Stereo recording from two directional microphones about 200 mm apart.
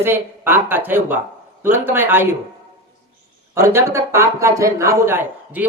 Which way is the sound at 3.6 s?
15° right (ahead or behind).